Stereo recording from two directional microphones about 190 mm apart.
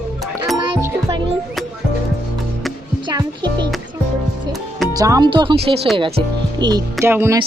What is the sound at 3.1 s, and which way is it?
Music, 20° right (ahead or behind).